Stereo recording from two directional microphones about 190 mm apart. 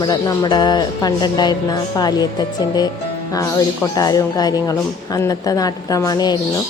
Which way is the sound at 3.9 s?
20° left (ahead or behind).